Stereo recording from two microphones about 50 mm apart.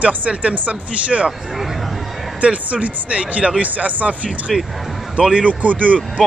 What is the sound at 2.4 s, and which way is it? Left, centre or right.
Speech, right.